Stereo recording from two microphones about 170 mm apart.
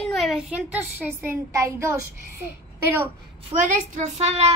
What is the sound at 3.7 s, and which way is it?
Speech, 40° right (ahead or behind).